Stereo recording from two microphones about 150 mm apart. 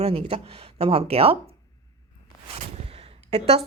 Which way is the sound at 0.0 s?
40° right (ahead or behind).